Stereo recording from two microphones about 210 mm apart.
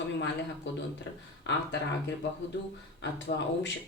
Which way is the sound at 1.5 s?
60° left (ahead or behind).